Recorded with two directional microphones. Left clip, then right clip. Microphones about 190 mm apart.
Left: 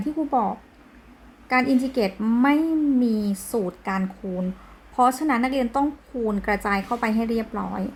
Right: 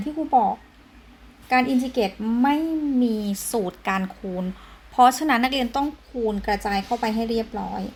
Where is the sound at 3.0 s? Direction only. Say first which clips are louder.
Even; 10° right (ahead or behind).